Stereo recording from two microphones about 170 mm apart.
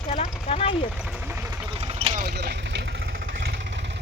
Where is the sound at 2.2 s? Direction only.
65° right (ahead or behind).